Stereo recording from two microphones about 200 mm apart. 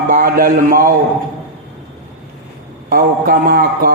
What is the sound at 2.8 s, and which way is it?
Speech, 45° right (ahead or behind).